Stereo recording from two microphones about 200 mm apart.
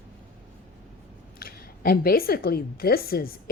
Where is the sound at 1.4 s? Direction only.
50° left (ahead or behind).